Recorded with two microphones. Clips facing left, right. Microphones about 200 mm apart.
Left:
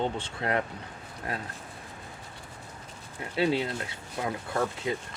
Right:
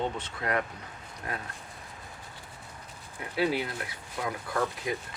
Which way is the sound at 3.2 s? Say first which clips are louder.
Left 2 dB; 25° left (ahead or behind).